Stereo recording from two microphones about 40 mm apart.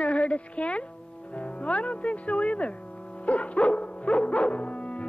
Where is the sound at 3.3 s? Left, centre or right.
Left.